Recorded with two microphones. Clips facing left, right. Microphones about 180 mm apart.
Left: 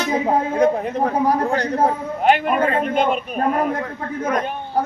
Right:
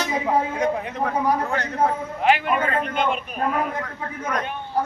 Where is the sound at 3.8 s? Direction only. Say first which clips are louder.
Left 6 dB; 25° left (ahead or behind).